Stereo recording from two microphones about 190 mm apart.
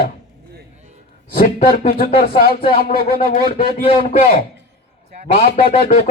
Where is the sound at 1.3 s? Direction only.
45° left (ahead or behind).